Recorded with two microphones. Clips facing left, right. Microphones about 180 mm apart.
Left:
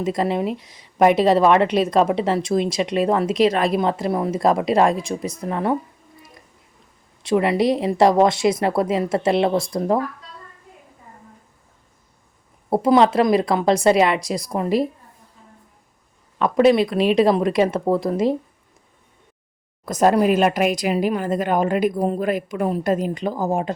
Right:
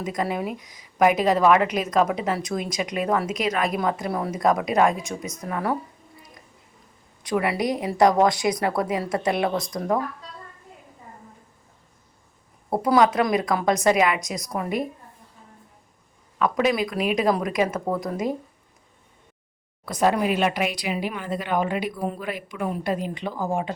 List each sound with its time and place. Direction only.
0.0 s a woman's voice: 30° left (ahead or behind)
7.2 s a woman's voice: 25° left (ahead or behind)
12.7 s a woman's voice: 25° left (ahead or behind)
16.4 s a woman's voice: 30° left (ahead or behind)
19.8 s speech: 45° left (ahead or behind)